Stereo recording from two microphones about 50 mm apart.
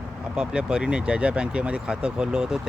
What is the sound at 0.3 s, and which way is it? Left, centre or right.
Speech, centre.